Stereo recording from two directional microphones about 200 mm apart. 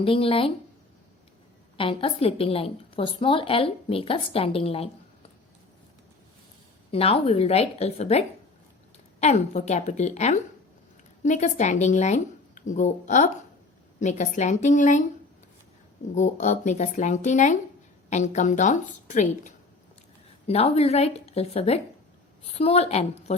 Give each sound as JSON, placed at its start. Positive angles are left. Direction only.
{"t": 0.0, "sound": "a woman's voice", "side_deg": 25}
{"t": 1.7, "sound": "a woman's voice", "side_deg": 25}
{"t": 6.9, "sound": "speech", "side_deg": 30}
{"t": 9.2, "sound": "speech", "side_deg": 35}
{"t": 16.1, "sound": "speech", "side_deg": 35}